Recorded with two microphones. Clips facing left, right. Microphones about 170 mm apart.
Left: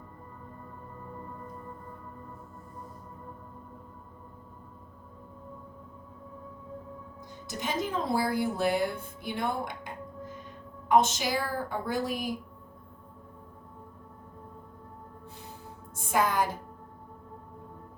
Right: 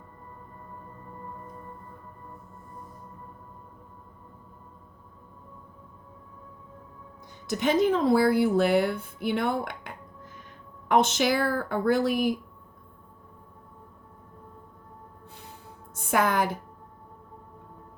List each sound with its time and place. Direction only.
7.4 s a woman's voice: 70° right (ahead or behind)
16.1 s a woman's voice: 70° right (ahead or behind)